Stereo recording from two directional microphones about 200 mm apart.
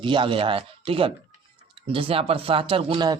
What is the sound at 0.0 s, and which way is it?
Speech, 25° right (ahead or behind).